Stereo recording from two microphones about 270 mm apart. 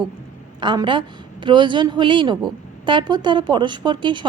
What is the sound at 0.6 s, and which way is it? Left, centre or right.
A woman's voice, centre.